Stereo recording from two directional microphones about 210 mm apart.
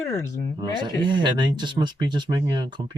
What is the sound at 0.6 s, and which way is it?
Speech, 20° right (ahead or behind).